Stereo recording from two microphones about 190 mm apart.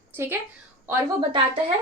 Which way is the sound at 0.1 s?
10° right (ahead or behind).